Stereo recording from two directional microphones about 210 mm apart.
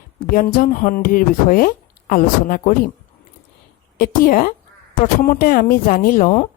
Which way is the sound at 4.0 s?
40° left (ahead or behind).